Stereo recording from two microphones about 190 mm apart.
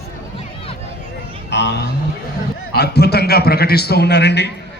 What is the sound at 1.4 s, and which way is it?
A man's voice, 65° left (ahead or behind).